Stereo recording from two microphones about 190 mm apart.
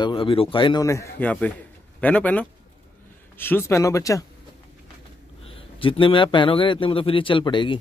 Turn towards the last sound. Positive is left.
turn(degrees=25)  # may be behind; listen again after turning